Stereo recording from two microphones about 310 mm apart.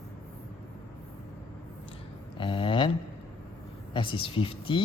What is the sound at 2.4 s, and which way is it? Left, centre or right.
Speech, centre.